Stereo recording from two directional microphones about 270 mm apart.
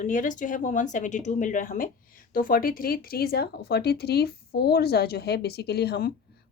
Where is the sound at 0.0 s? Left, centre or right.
Left.